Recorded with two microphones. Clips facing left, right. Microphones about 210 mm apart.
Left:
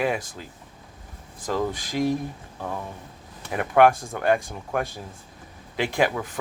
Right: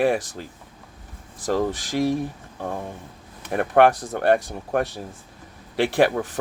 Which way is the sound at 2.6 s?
45° right (ahead or behind).